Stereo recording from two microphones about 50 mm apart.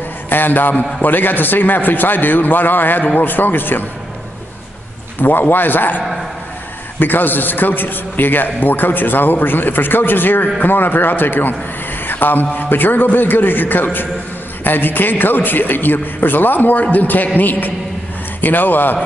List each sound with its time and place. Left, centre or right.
0.3 s a man's voice: left
5.2 s a man's voice: left